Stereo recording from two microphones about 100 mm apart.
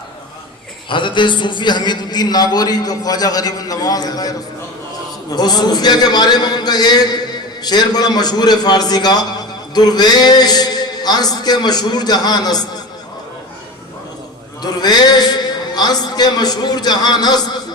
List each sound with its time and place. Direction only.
0.9 s a man's voice: 55° left (ahead or behind)
14.6 s a man's voice: 45° left (ahead or behind)